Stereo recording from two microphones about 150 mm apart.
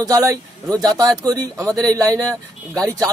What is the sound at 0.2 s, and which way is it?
Speech, 20° right (ahead or behind).